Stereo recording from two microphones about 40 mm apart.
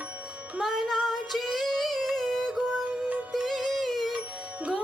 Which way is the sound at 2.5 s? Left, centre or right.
Centre.